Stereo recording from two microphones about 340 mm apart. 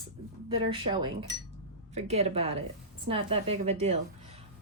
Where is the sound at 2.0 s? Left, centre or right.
Centre.